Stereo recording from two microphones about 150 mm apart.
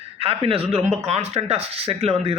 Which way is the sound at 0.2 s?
40° right (ahead or behind).